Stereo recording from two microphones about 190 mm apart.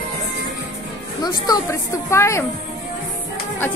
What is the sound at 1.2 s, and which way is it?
A woman's voice, 20° left (ahead or behind).